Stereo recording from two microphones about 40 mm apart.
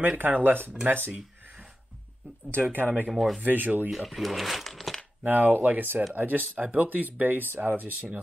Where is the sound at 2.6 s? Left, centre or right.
Right.